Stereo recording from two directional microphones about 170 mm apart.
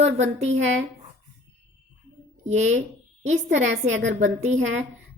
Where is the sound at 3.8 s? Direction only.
45° right (ahead or behind).